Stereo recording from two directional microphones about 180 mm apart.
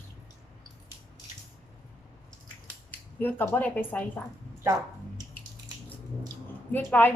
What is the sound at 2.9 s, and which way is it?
Speech, 10° left (ahead or behind).